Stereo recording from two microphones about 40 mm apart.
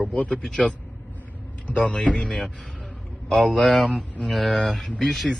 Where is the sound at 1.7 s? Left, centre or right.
Left.